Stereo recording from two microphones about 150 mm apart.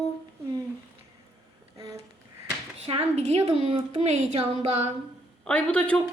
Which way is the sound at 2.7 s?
40° right (ahead or behind).